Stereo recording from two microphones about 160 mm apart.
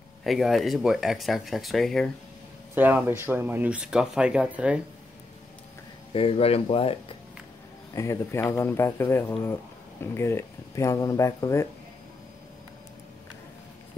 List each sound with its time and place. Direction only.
0.2 s speech: centre (ahead or behind)
2.7 s speech: 10° right (ahead or behind)
6.1 s speech: 35° left (ahead or behind)
7.9 s speech: 20° left (ahead or behind)